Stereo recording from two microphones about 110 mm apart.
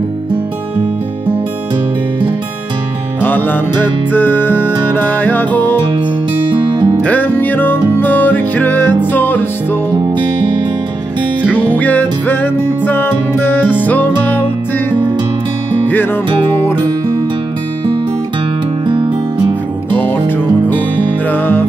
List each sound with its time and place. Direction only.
3.2 s music: 15° left (ahead or behind)
6.5 s music: 45° right (ahead or behind)
7.0 s music: 15° left (ahead or behind)
10.1 s music: 45° right (ahead or behind)
11.5 s music: 15° left (ahead or behind)
18.9 s music: 45° right (ahead or behind)
20.0 s music: 15° left (ahead or behind)